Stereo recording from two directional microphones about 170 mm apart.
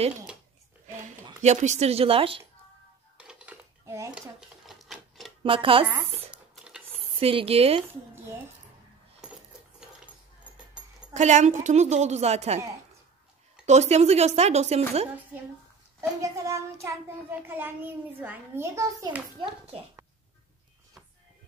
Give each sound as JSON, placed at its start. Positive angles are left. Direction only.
{"t": 1.0, "sound": "a woman's voice", "side_deg": -45}
{"t": 3.2, "sound": "dishes", "side_deg": -5}
{"t": 3.8, "sound": "speech", "side_deg": -20}
{"t": 4.6, "sound": "sewing machine", "side_deg": 0}
{"t": 5.4, "sound": "a woman's voice", "side_deg": -30}
{"t": 6.3, "sound": "a sound", "side_deg": -5}
{"t": 7.2, "sound": "a woman's voice", "side_deg": -35}
{"t": 9.2, "sound": "keys jangling", "side_deg": -5}
{"t": 11.1, "sound": "a woman's voice", "side_deg": -45}
{"t": 13.7, "sound": "a woman's voice", "side_deg": -40}
{"t": 16.2, "sound": "child singing", "side_deg": -15}